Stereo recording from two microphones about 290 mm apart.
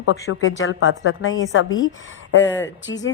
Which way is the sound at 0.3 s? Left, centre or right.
Left.